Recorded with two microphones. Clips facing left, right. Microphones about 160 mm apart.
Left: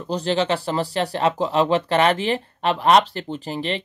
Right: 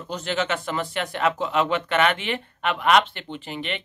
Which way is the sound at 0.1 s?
35° left (ahead or behind).